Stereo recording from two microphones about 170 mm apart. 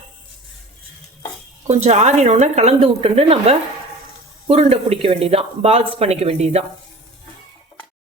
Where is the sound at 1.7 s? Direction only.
40° right (ahead or behind).